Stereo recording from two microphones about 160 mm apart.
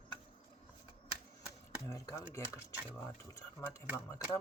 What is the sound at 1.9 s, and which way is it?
Speech, 20° left (ahead or behind).